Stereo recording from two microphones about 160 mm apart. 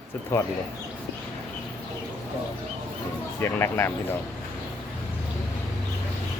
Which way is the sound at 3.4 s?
15° left (ahead or behind).